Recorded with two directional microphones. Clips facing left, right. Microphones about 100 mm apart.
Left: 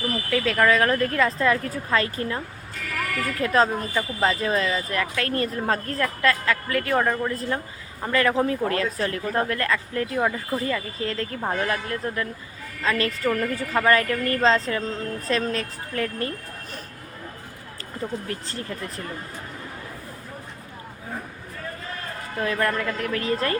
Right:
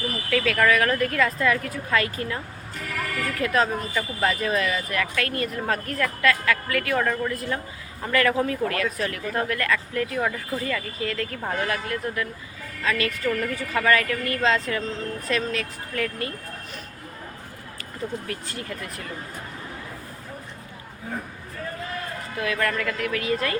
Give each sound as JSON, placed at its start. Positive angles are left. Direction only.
{"t": 0.3, "sound": "speech", "side_deg": 20}
{"t": 11.0, "sound": "a woman's voice", "side_deg": 30}
{"t": 18.3, "sound": "a woman's voice", "side_deg": 30}
{"t": 22.5, "sound": "a woman's voice", "side_deg": 25}